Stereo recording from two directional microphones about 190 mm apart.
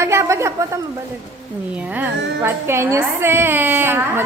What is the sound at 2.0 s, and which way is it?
A woman's voice, 10° right (ahead or behind).